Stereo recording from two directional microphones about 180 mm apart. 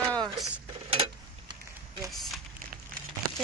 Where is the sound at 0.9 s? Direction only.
30° right (ahead or behind).